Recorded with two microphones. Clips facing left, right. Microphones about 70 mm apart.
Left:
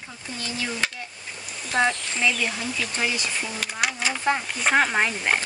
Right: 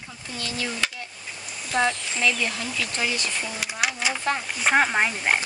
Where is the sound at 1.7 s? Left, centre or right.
Centre.